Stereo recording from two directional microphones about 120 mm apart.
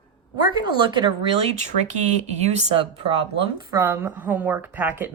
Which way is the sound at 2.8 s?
45° right (ahead or behind).